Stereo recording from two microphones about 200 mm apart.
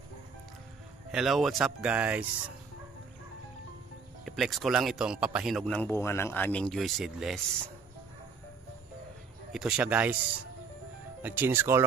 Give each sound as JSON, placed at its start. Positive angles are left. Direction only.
{"t": 1.1, "sound": "a man's voice", "side_deg": 0}
{"t": 4.2, "sound": "a man's voice", "side_deg": 0}
{"t": 9.5, "sound": "a man's voice", "side_deg": -5}
{"t": 11.2, "sound": "speech", "side_deg": -10}